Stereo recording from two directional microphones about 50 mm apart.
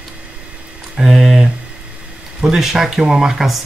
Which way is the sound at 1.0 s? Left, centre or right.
Centre.